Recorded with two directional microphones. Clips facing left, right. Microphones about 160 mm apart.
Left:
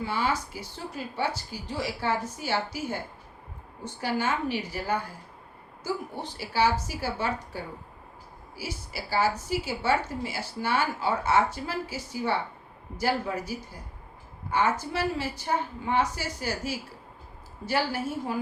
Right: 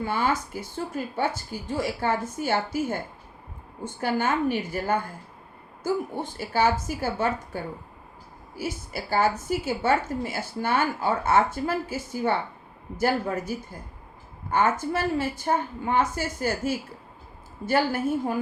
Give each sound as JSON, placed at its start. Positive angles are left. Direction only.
{"t": 0.0, "sound": "a woman's voice", "side_deg": -50}
{"t": 3.8, "sound": "a woman's voice", "side_deg": -50}
{"t": 14.5, "sound": "a woman's voice", "side_deg": -50}